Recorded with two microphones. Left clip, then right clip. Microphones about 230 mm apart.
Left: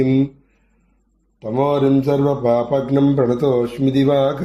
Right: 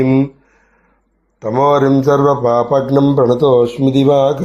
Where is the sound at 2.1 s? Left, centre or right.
Centre.